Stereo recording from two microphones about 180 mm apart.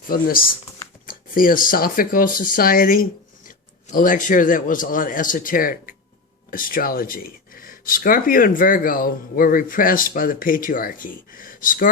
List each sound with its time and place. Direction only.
0.1 s speech: 55° left (ahead or behind)